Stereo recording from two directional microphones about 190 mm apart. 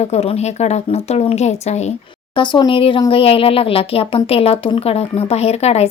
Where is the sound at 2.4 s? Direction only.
25° left (ahead or behind).